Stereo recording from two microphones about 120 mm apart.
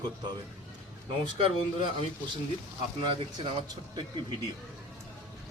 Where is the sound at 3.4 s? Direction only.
45° right (ahead or behind).